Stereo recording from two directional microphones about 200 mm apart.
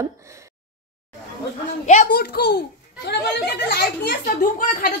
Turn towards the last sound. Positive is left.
turn(degrees=45)  # may be behind; listen again after turning